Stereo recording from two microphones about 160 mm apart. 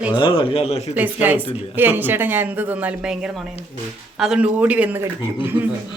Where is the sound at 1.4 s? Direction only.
35° left (ahead or behind).